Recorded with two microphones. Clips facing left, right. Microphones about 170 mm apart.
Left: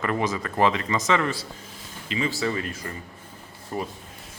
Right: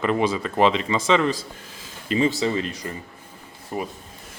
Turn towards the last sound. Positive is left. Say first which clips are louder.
# right 1 dB
turn(degrees=-15)  # may be behind; listen again after turning